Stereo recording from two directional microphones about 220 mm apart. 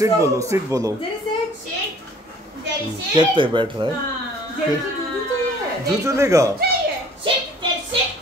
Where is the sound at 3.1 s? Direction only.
20° right (ahead or behind).